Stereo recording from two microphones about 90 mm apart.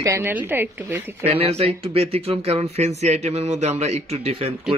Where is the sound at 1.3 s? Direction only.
90° right.